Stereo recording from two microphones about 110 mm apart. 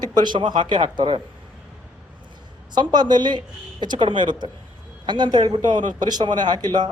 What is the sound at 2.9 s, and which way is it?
Speech, 40° right (ahead or behind).